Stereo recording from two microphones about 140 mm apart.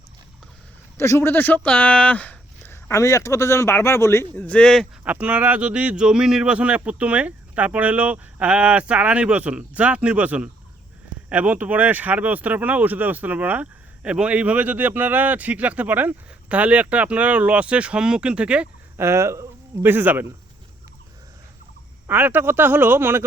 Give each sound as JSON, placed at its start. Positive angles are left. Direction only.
{"t": 0.9, "sound": "speech", "side_deg": 20}
{"t": 2.9, "sound": "speech", "side_deg": 20}
{"t": 5.0, "sound": "speech", "side_deg": -10}
{"t": 22.0, "sound": "speech", "side_deg": -15}